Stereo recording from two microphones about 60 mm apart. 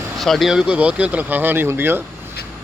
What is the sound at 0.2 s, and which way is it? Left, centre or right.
Speech, centre.